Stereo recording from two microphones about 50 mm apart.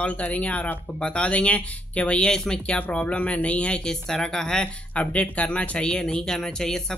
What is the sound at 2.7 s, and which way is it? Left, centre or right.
Speech, left.